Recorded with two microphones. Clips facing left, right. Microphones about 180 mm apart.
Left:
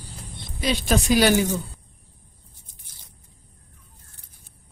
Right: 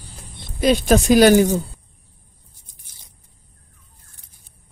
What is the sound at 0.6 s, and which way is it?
Speech, 50° right (ahead or behind).